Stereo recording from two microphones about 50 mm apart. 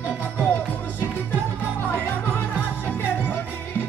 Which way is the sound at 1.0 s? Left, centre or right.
Left.